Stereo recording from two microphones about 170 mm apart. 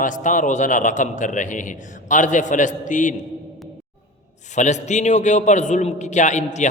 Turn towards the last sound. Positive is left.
turn(degrees=45)  # may be behind; listen again after turning